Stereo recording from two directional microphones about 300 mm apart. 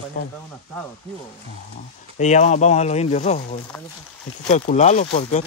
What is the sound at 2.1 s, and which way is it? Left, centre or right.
Speech, left.